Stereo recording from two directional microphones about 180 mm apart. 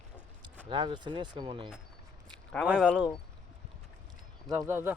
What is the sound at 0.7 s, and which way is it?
Speech, 25° right (ahead or behind).